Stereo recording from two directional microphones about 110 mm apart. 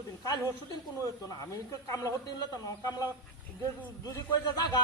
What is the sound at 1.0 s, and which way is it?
A man's voice, 30° left (ahead or behind).